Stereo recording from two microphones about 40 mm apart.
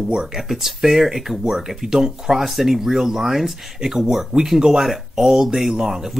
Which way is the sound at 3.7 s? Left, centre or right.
Centre.